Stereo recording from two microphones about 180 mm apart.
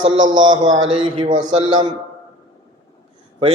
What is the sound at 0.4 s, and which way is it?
A man's voice, 25° right (ahead or behind).